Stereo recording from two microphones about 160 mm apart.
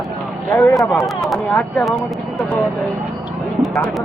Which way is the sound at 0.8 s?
Centre (ahead or behind).